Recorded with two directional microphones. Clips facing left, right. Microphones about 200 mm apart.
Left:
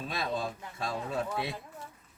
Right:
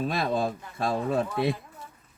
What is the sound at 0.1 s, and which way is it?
Speech, 55° right (ahead or behind).